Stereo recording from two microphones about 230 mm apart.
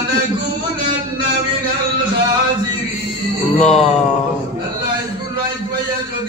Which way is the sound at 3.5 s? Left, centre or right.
Left.